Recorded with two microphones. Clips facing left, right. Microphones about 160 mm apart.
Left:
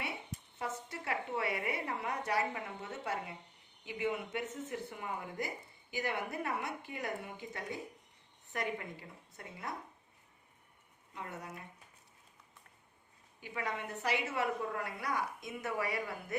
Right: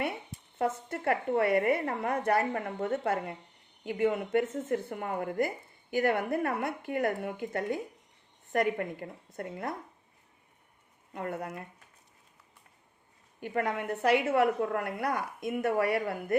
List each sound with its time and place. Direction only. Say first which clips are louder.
0.6 s a woman's voice: right 11 dB; 55° right (ahead or behind)
11.1 s a woman's voice: right 9 dB; 55° right (ahead or behind)
13.4 s a woman's voice: right 8 dB; 55° right (ahead or behind)